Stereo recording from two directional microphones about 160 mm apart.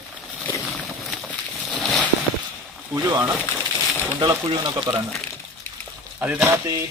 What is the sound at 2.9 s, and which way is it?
Speech, 15° right (ahead or behind).